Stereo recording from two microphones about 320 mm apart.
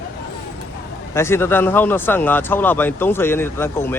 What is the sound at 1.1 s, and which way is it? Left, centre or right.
Speech, centre.